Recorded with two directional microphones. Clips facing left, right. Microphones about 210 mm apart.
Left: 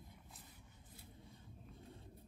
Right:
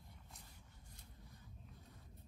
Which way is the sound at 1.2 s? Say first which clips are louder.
Left 2 dB; 25° left (ahead or behind).